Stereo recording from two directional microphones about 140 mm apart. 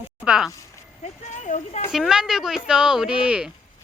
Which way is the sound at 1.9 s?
5° right (ahead or behind).